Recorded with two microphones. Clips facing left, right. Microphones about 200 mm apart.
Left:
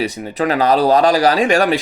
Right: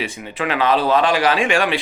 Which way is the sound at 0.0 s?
40° left (ahead or behind).